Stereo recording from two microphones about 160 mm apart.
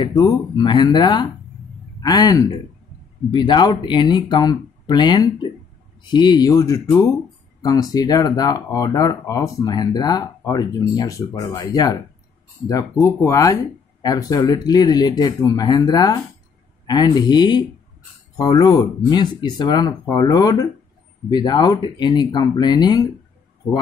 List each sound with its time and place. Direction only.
0.0 s speech: 25° left (ahead or behind)